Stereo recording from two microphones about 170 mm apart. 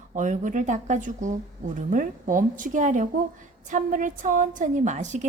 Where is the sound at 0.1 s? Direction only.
50° right (ahead or behind).